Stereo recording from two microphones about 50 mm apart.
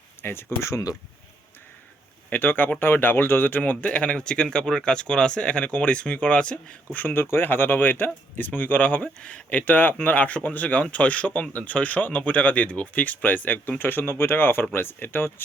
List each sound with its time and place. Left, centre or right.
0.2 s speech: left
0.6 s speech: left
2.3 s speech: left
7.0 s speech: left